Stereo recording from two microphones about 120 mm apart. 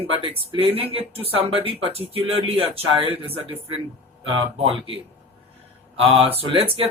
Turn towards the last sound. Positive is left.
turn(degrees=-50)  # may be behind; listen again after turning